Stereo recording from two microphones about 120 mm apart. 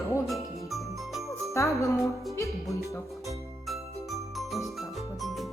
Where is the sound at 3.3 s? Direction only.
Centre (ahead or behind).